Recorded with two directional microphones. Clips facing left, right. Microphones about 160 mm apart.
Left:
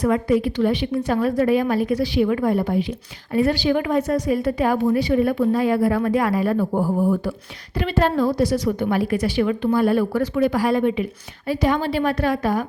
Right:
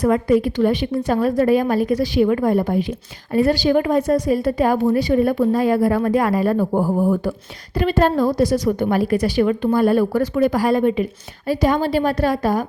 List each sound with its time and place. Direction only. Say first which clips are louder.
0.0 s a woman's voice: right 3 dB; 45° right (ahead or behind)